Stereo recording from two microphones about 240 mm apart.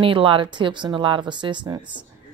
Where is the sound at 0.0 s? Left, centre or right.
Right.